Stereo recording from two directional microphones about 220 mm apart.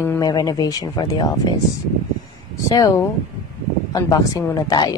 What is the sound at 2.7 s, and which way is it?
Speech, 15° left (ahead or behind).